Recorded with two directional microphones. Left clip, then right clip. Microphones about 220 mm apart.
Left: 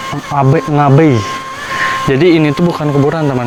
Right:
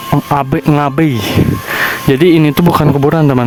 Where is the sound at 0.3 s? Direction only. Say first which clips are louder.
Left 3 dB; 40° right (ahead or behind).